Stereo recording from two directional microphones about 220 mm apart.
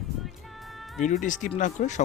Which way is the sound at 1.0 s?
35° left (ahead or behind).